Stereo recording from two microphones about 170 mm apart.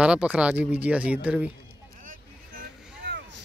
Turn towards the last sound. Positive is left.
turn(degrees=-80)